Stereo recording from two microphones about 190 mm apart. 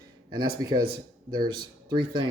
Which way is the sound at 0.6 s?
20° right (ahead or behind).